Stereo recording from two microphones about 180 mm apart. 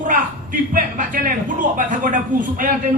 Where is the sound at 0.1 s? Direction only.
50° right (ahead or behind).